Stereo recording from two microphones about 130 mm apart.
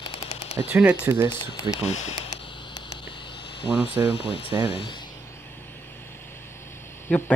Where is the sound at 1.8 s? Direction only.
50° left (ahead or behind).